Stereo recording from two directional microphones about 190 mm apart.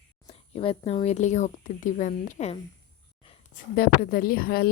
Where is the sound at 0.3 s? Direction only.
30° left (ahead or behind).